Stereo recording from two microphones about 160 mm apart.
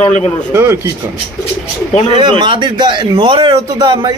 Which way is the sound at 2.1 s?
30° right (ahead or behind).